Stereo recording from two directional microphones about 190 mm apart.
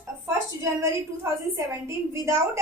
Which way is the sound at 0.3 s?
15° right (ahead or behind).